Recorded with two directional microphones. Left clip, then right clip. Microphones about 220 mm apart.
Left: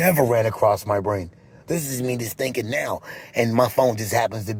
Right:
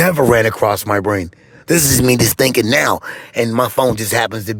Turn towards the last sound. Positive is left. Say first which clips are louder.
# right 5 dB
turn(degrees=-40)  # may be behind; listen again after turning